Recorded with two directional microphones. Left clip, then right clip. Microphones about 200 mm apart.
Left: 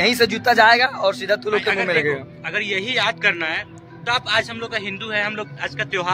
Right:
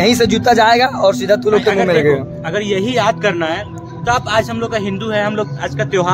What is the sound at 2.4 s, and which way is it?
A man's voice, 20° right (ahead or behind).